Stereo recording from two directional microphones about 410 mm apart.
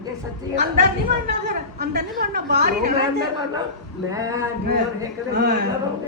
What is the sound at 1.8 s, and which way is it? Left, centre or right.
A woman's voice, right.